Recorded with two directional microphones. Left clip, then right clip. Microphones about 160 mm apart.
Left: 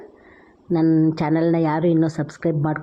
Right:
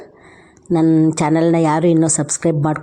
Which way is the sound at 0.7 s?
30° right (ahead or behind).